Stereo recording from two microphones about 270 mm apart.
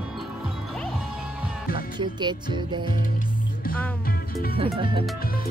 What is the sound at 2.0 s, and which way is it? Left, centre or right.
Music, centre.